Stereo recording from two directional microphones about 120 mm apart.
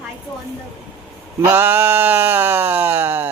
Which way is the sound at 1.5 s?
15° right (ahead or behind).